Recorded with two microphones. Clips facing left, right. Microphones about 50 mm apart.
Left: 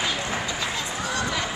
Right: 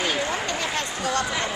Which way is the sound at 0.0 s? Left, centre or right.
Right.